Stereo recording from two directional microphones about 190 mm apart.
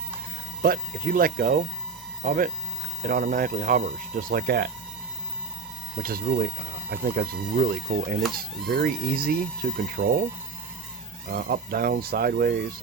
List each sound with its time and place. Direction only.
0.6 s speech: 50° right (ahead or behind)
6.0 s speech: 50° right (ahead or behind)
11.3 s speech: 50° right (ahead or behind)